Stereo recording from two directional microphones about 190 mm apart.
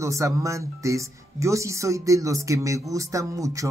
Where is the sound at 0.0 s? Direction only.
15° right (ahead or behind).